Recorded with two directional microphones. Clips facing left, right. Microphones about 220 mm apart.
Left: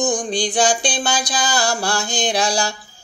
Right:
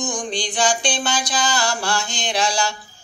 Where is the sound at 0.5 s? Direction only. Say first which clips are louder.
Left 1 dB; 35° left (ahead or behind).